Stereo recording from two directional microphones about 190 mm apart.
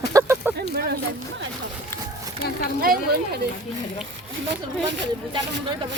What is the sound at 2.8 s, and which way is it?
Speech, 55° right (ahead or behind).